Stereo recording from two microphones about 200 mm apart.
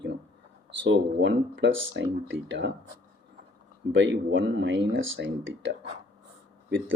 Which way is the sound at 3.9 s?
65° right (ahead or behind).